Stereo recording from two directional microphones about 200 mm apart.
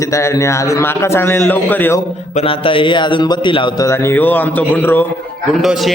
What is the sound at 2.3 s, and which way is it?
A man's voice, 30° left (ahead or behind).